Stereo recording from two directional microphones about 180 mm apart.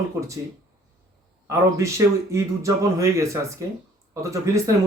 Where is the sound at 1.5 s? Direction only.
15° right (ahead or behind).